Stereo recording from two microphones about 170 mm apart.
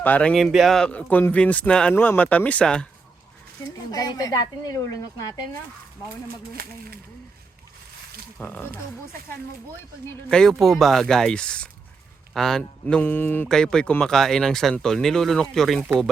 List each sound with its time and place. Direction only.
0.0 s speech: 10° left (ahead or behind)
3.9 s speech: 20° left (ahead or behind)
6.2 s speech: 60° right (ahead or behind)
8.4 s speech: 10° left (ahead or behind)
10.2 s speech: 5° left (ahead or behind)